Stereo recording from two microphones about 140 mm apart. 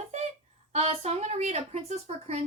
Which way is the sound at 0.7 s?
50° right (ahead or behind).